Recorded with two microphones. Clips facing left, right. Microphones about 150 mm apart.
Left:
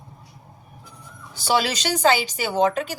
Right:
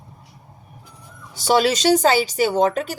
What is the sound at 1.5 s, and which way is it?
Speech, 45° right (ahead or behind).